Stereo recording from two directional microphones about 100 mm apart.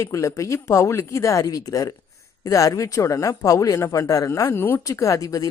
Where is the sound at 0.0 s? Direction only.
35° left (ahead or behind).